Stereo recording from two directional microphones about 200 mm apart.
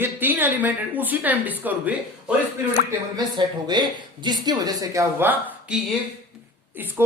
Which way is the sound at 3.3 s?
20° right (ahead or behind).